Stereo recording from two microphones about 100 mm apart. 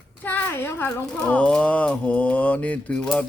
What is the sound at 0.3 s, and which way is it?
Speech, 20° left (ahead or behind).